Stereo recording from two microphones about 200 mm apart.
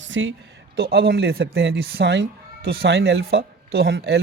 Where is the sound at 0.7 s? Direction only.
55° right (ahead or behind).